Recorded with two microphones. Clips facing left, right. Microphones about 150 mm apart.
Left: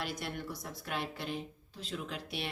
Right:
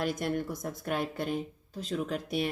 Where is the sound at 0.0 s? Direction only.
45° right (ahead or behind).